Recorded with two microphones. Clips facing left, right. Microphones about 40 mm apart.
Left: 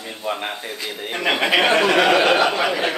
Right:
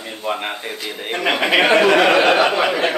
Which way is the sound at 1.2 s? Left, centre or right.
Centre.